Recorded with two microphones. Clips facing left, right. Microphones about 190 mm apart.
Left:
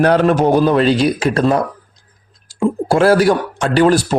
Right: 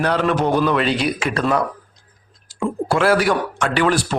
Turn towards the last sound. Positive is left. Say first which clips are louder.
# left 6 dB
turn(degrees=40)  # may be behind; listen again after turning